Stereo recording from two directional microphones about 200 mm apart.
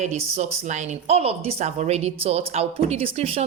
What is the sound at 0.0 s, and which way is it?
Speech, 35° right (ahead or behind).